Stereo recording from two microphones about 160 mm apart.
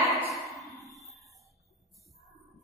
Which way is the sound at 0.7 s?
Centre (ahead or behind).